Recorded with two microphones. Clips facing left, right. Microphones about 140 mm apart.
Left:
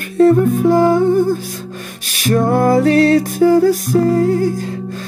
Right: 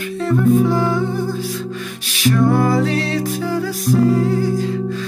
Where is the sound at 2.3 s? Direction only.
45° left (ahead or behind).